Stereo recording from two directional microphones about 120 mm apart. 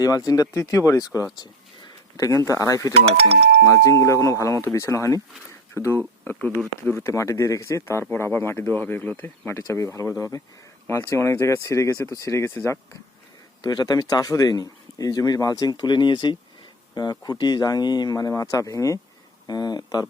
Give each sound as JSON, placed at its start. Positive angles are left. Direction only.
{"t": 0.0, "sound": "speech", "side_deg": 30}
{"t": 5.5, "sound": "a sound", "side_deg": 20}
{"t": 6.8, "sound": "speech", "side_deg": 20}
{"t": 13.6, "sound": "speech", "side_deg": 35}